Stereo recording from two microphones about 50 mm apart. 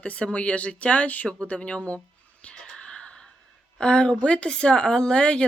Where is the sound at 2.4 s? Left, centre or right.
Left.